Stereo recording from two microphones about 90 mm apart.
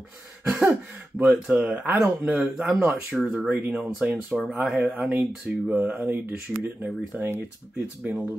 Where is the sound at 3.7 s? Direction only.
5° right (ahead or behind).